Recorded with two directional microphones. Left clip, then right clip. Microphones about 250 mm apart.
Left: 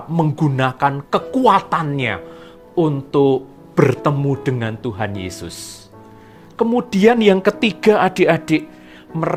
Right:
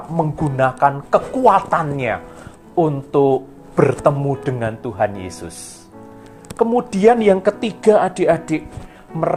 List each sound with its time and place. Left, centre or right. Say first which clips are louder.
0.2 s speech: right 1 dB; left
6.6 s speech: even; left